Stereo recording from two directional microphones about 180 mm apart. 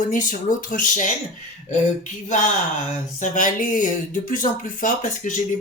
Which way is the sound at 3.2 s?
45° left (ahead or behind).